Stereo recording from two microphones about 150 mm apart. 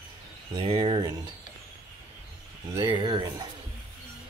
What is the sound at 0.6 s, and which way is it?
Speech, 35° right (ahead or behind).